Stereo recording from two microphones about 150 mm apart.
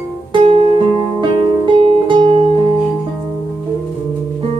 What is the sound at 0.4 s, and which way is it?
Music, 40° right (ahead or behind).